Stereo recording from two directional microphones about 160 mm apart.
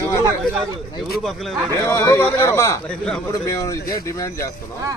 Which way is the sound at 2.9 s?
5° left (ahead or behind).